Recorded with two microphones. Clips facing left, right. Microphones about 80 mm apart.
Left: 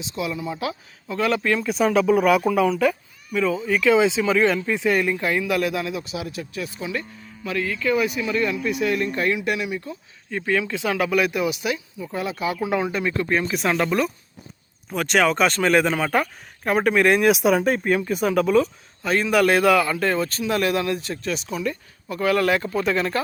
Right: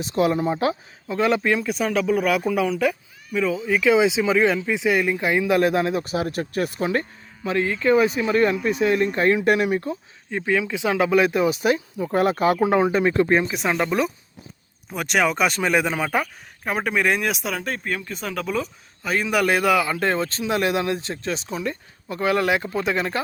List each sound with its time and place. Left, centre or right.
0.0 s speech: right
1.0 s speech: right
1.5 s speech: centre; by 7.0 s right
7.4 s speech: right
9.9 s speech: centre; by 12.5 s right
12.5 s speech: right
13.4 s speech: centre
18.4 s speech: centre
20.0 s speech: right